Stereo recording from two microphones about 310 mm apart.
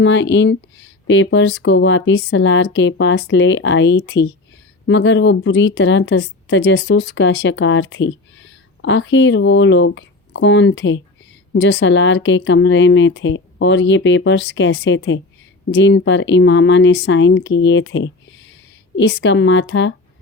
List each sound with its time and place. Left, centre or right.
0.0 s speech: left